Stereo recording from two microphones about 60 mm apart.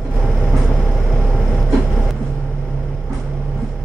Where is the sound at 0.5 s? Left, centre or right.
Centre.